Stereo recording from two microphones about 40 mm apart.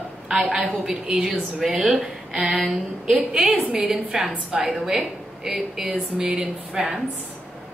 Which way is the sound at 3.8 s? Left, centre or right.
Centre.